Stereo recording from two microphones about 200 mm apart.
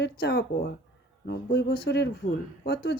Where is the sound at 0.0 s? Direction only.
55° left (ahead or behind).